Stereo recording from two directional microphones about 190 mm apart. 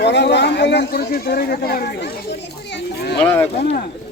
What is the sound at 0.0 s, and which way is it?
Speech, 65° left (ahead or behind).